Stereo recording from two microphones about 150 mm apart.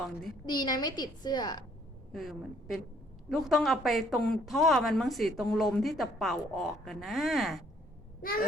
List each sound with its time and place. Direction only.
0.0 s speech: centre (ahead or behind)
0.4 s a woman's voice: 30° left (ahead or behind)
2.1 s speech: centre (ahead or behind)